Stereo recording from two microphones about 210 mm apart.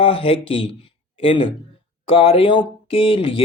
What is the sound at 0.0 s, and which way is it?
Speech, 25° left (ahead or behind).